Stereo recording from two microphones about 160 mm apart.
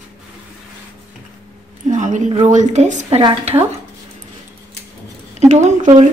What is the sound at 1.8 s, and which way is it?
A woman's voice, 50° right (ahead or behind).